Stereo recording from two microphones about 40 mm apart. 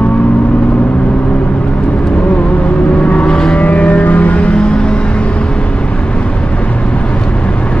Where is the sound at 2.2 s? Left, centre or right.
Left.